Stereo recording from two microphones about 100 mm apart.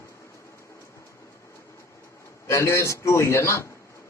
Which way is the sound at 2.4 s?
30° left (ahead or behind).